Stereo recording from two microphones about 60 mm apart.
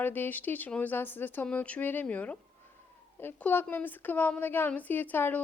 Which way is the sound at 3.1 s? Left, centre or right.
Left.